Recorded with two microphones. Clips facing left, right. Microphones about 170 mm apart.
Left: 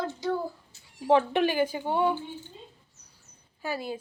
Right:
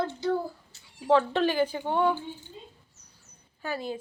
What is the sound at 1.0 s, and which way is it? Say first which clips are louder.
Speech: even; 15° left (ahead or behind).